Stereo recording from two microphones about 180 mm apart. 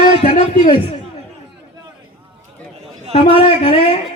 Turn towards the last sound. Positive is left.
turn(degrees=30)  # may be behind; listen again after turning